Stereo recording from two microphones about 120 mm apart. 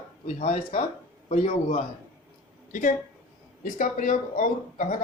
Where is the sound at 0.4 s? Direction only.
60° left (ahead or behind).